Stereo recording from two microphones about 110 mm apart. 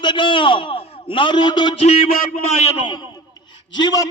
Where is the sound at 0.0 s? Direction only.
45° left (ahead or behind).